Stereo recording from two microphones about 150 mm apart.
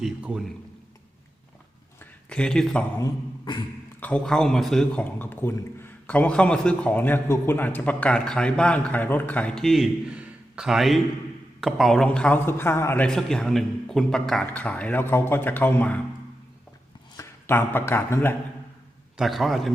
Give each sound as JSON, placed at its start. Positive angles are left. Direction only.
{"t": 0.0, "sound": "a man's voice", "side_deg": -5}
{"t": 2.0, "sound": "a sound", "side_deg": 5}
{"t": 3.0, "sound": "speech", "side_deg": 30}
{"t": 4.0, "sound": "a man's voice", "side_deg": 5}
{"t": 5.2, "sound": "a man's voice", "side_deg": 15}
{"t": 13.1, "sound": "a man's voice", "side_deg": 0}
{"t": 17.2, "sound": "speech", "side_deg": 15}
{"t": 19.1, "sound": "a man's voice", "side_deg": 0}